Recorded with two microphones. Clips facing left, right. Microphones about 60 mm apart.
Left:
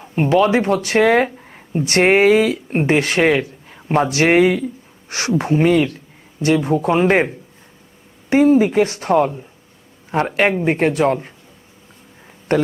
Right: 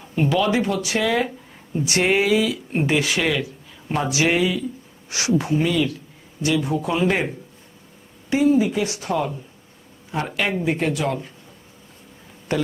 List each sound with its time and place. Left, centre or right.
0.2 s speech: left
8.3 s speech: left
12.5 s speech: left